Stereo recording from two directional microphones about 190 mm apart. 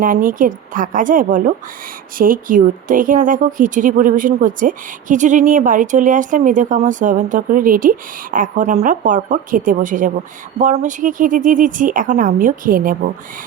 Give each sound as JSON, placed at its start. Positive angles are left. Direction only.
{"t": 0.0, "sound": "speech", "side_deg": -45}